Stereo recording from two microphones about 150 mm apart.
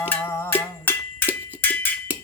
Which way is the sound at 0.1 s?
15° left (ahead or behind).